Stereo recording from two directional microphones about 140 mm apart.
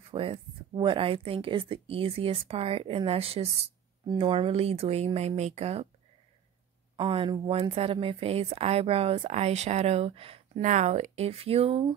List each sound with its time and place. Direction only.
0.1 s speech: 40° right (ahead or behind)
7.0 s speech: 35° right (ahead or behind)